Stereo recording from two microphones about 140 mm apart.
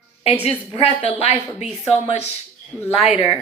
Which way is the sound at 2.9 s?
45° left (ahead or behind).